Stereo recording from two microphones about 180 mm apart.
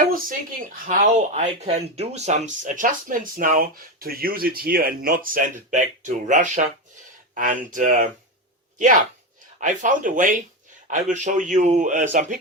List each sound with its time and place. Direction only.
0.0 s speech: 50° right (ahead or behind)
9.6 s speech: 45° right (ahead or behind)